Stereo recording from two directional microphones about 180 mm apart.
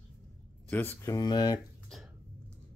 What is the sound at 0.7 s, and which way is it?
Speech, 10° left (ahead or behind).